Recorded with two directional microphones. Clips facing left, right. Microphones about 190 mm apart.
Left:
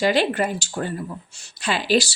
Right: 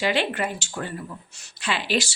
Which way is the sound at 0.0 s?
40° left (ahead or behind).